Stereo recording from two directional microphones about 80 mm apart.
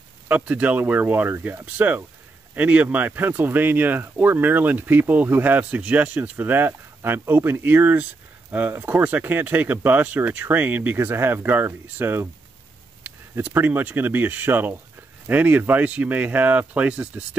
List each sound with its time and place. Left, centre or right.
0.3 s speech: centre